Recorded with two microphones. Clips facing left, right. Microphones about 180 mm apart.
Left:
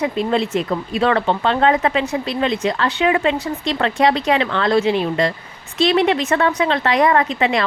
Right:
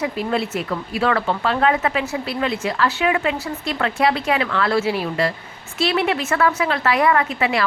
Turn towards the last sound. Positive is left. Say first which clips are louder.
# left 2 dB
turn(degrees=30)  # may be behind; listen again after turning